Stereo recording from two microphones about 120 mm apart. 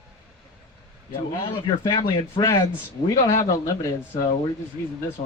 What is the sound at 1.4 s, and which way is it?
Speech, 40° left (ahead or behind).